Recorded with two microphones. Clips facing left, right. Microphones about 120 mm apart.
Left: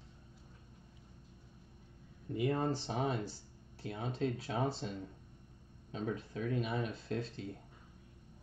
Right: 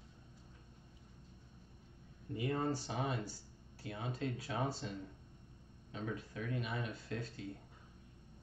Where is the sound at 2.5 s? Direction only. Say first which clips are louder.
Left 2 dB; 20° left (ahead or behind).